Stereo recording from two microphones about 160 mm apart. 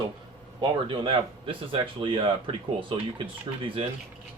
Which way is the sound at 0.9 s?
30° right (ahead or behind).